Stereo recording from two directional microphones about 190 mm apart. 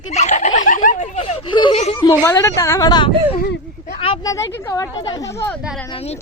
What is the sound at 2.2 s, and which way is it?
Speech, 15° left (ahead or behind).